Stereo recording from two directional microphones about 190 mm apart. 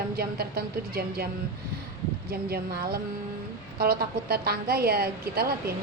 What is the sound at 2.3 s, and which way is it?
A woman's voice, 55° right (ahead or behind).